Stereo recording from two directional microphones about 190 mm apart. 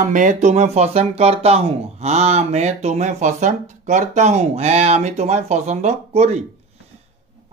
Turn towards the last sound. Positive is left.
turn(degrees=-35)  # may be behind; listen again after turning